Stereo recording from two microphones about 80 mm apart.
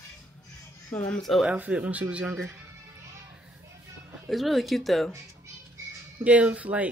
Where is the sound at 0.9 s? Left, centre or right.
Left.